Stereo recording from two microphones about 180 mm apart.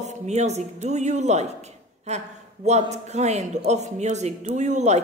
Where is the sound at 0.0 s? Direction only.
40° right (ahead or behind).